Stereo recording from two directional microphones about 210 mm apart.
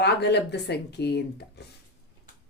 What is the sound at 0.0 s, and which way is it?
A woman's voice, 55° left (ahead or behind).